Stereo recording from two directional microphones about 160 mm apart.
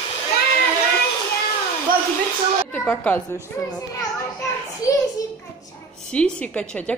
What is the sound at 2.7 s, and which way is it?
Speech, 5° left (ahead or behind).